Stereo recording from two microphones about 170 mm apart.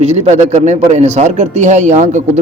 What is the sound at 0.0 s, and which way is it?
A man's voice, 35° right (ahead or behind).